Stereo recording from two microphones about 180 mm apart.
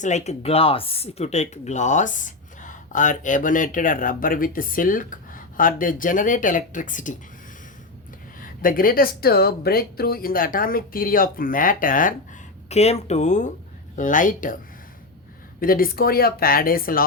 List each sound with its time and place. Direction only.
0.0 s speech: 40° left (ahead or behind)
8.4 s speech: 50° left (ahead or behind)
12.6 s speech: 35° left (ahead or behind)
15.6 s speech: 55° left (ahead or behind)